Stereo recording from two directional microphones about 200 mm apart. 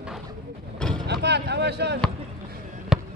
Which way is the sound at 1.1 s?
55° right (ahead or behind).